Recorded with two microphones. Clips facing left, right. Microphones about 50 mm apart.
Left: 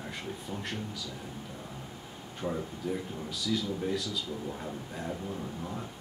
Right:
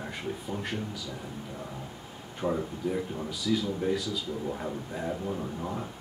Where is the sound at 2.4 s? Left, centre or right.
Right.